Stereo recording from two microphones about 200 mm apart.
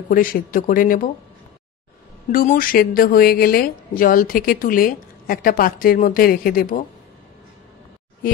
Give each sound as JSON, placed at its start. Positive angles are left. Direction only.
{"t": 0.1, "sound": "a woman's voice", "side_deg": 45}
{"t": 2.3, "sound": "a woman's voice", "side_deg": 40}